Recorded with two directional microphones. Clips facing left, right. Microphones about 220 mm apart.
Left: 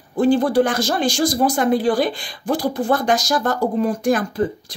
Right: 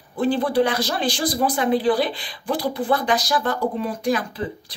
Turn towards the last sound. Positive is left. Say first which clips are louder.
# left 7 dB
turn(degrees=45)  # may be behind; listen again after turning